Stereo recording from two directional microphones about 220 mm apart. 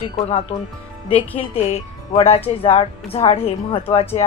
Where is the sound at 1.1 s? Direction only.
5° left (ahead or behind).